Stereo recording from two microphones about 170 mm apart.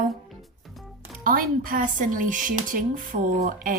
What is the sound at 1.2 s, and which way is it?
Speech, 55° right (ahead or behind).